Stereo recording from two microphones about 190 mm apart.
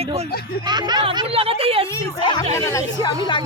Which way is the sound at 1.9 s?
20° left (ahead or behind).